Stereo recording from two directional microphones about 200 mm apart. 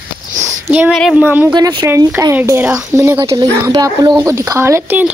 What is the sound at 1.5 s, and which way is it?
Speech, 20° right (ahead or behind).